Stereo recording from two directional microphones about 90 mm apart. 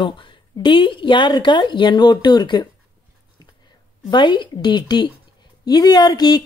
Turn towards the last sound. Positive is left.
turn(degrees=50)  # may be behind; listen again after turning